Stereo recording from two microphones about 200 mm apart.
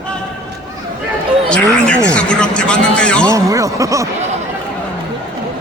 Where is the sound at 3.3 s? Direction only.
15° right (ahead or behind).